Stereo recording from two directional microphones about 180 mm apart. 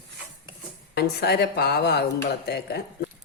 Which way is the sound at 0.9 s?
65° left (ahead or behind).